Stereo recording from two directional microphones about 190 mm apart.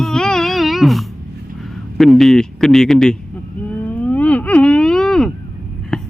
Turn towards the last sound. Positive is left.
turn(degrees=5)  # may be behind; listen again after turning